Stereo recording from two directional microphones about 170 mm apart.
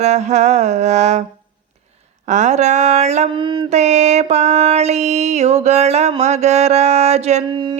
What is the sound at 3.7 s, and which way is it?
Music, 40° right (ahead or behind).